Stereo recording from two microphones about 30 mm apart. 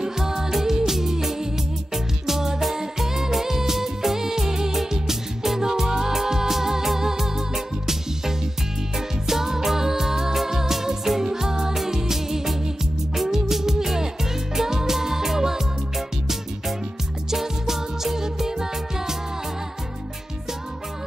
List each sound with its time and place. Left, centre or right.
0.0 s music: centre
17.3 s music: centre